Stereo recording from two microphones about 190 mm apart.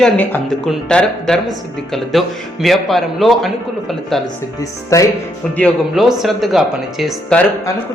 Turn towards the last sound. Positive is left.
turn(degrees=0)  # may be behind; listen again after turning